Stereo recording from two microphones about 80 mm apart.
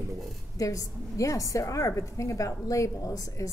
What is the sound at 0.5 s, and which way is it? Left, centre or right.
A woman's voice, left.